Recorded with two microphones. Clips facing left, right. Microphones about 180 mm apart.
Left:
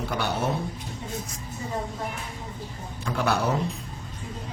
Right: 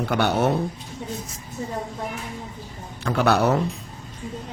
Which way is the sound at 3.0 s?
70° right (ahead or behind).